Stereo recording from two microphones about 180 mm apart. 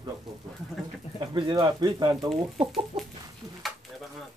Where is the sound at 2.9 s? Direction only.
35° right (ahead or behind).